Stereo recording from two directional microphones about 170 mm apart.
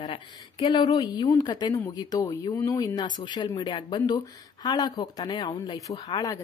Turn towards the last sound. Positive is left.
turn(degrees=20)  # may be behind; listen again after turning